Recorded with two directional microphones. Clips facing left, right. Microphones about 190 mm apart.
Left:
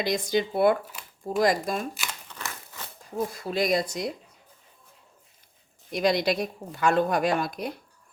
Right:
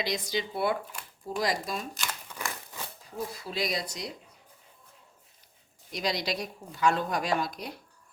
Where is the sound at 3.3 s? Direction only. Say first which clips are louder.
Left 8 dB; 50° left (ahead or behind).